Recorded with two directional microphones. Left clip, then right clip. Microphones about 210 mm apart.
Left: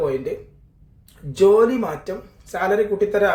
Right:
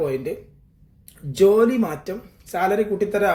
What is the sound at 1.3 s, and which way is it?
Speech, 35° right (ahead or behind).